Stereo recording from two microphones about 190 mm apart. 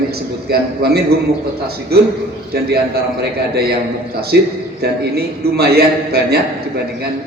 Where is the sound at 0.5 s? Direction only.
55° right (ahead or behind).